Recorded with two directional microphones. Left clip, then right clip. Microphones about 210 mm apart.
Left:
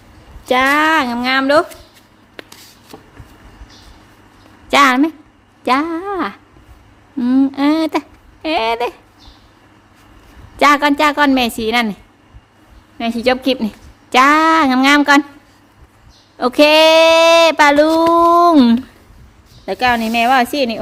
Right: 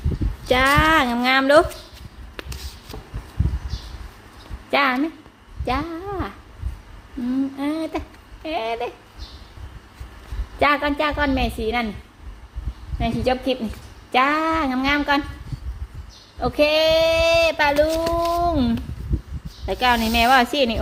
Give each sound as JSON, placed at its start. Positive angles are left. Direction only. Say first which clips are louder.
{"t": 0.4, "sound": "speech", "louder": "left 4 dB", "side_deg": 15}
{"t": 4.7, "sound": "a woman's voice", "louder": "left 9 dB", "side_deg": 35}
{"t": 10.6, "sound": "a woman's voice", "louder": "left 8 dB", "side_deg": 35}
{"t": 13.0, "sound": "speech", "louder": "left 6 dB", "side_deg": 45}
{"t": 16.4, "sound": "speech", "louder": "left 8 dB", "side_deg": 45}
{"t": 19.6, "sound": "speech", "louder": "left 4 dB", "side_deg": 25}